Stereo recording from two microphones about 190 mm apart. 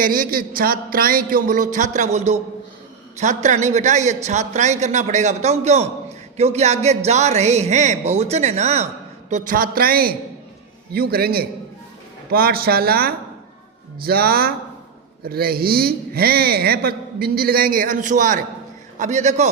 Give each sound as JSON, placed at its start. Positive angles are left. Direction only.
{"t": 0.0, "sound": "a man's voice", "side_deg": -45}